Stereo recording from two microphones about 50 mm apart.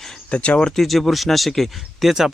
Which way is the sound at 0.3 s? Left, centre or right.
Left.